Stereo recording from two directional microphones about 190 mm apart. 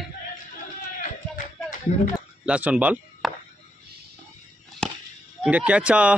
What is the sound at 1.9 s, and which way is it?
Speech, 35° left (ahead or behind).